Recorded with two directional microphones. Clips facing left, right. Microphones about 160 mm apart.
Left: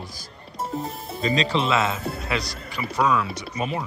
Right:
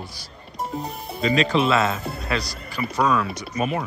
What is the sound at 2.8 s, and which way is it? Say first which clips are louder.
Speech: right 3 dB; 10° left (ahead or behind).